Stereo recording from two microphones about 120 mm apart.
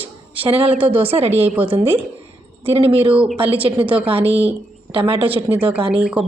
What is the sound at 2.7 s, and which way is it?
Speech, 55° right (ahead or behind).